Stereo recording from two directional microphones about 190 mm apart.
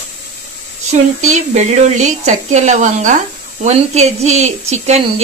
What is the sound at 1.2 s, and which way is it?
Speech, 40° right (ahead or behind).